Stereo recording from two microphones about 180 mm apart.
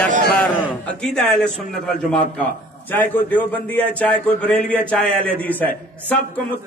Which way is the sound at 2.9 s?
10° left (ahead or behind).